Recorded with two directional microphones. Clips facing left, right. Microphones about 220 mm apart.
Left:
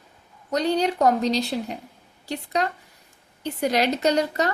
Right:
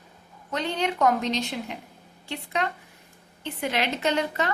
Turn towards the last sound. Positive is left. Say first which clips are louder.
# left 4 dB
turn(degrees=40)  # may be behind; listen again after turning